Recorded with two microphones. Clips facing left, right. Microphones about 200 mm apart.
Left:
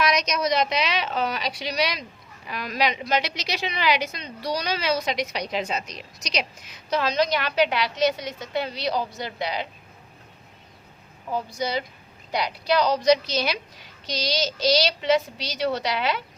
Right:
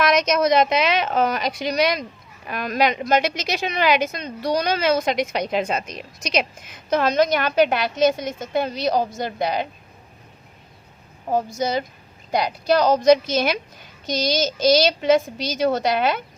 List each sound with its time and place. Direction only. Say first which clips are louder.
0.0 s a woman's voice: right 5 dB; 50° right (ahead or behind)
11.3 s a woman's voice: right 5 dB; 45° right (ahead or behind)